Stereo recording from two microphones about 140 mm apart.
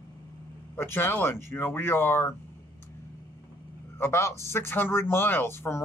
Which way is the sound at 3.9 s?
20° left (ahead or behind).